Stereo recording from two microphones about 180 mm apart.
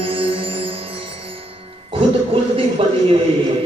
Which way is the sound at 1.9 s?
30° right (ahead or behind).